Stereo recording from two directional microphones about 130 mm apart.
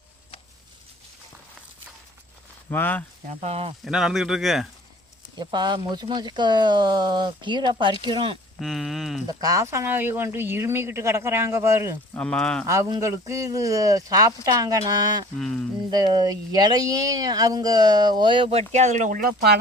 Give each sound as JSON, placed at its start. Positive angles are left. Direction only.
{"t": 2.6, "sound": "speech", "side_deg": 15}
{"t": 3.2, "sound": "speech", "side_deg": -55}
{"t": 3.8, "sound": "speech", "side_deg": -5}
{"t": 5.4, "sound": "speech", "side_deg": -35}
{"t": 8.6, "sound": "speech", "side_deg": 0}
{"t": 9.2, "sound": "speech", "side_deg": -25}
{"t": 12.1, "sound": "speech", "side_deg": 10}
{"t": 12.6, "sound": "speech", "side_deg": -25}
{"t": 15.4, "sound": "speech", "side_deg": 5}
{"t": 15.9, "sound": "speech", "side_deg": -30}